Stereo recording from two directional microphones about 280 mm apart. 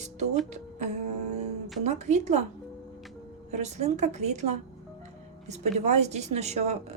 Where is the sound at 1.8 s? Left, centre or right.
Right.